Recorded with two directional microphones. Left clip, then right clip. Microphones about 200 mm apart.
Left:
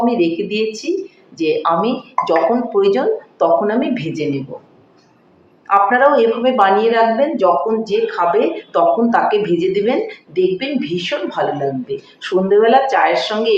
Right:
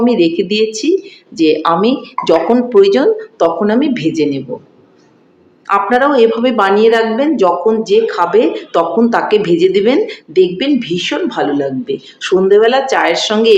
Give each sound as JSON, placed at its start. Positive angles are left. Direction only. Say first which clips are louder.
{"t": 0.0, "sound": "speech", "louder": "right 4 dB", "side_deg": -55}
{"t": 5.6, "sound": "a woman's voice", "louder": "even", "side_deg": -55}